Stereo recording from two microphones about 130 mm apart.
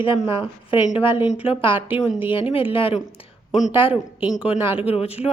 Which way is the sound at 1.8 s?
15° right (ahead or behind).